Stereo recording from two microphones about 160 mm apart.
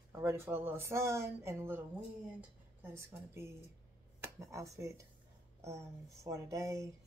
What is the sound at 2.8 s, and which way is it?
Speech, 15° right (ahead or behind).